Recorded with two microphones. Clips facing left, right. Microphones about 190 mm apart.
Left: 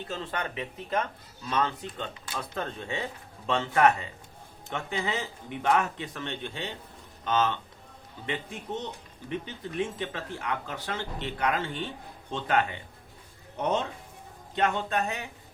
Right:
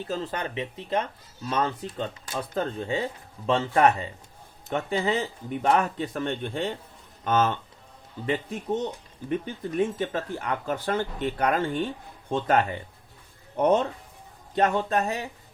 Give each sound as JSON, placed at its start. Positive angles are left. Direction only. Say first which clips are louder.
{"t": 0.1, "sound": "speech", "louder": "right 4 dB", "side_deg": -35}
{"t": 1.5, "sound": "speech", "louder": "right 2 dB", "side_deg": -40}
{"t": 14.5, "sound": "speech", "louder": "right 4 dB", "side_deg": -40}